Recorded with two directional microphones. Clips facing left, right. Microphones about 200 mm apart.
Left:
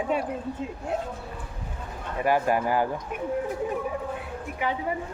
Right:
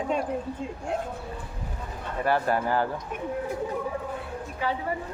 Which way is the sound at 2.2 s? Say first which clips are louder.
Left 2 dB; 15° left (ahead or behind).